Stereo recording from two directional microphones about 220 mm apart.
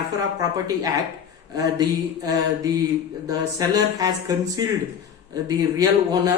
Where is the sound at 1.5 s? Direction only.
15° right (ahead or behind).